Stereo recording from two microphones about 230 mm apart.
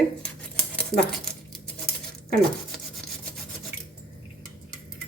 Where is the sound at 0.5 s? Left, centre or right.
Centre.